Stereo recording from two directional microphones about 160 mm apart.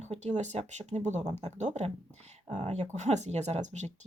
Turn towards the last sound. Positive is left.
turn(degrees=-45)  # may be behind; listen again after turning